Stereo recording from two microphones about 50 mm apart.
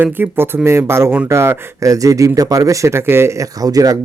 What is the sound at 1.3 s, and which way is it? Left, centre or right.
Speech, right.